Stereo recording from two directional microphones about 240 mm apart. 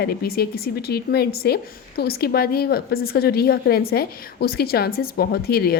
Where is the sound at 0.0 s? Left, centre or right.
Left.